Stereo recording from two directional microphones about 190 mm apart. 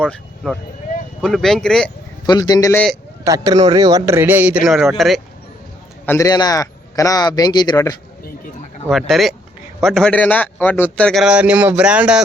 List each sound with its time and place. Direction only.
0.0 s a man's voice: 5° left (ahead or behind)
2.2 s a man's voice: 20° left (ahead or behind)
3.2 s speech: 20° right (ahead or behind); by 5.2 s centre (ahead or behind)
6.1 s a man's voice: 15° left (ahead or behind)
8.9 s a man's voice: centre (ahead or behind)